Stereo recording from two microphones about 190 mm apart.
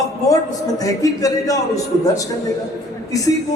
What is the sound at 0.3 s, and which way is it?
A man's voice, 20° left (ahead or behind).